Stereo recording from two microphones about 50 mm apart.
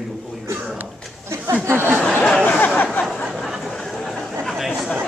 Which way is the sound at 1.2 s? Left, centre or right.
Right.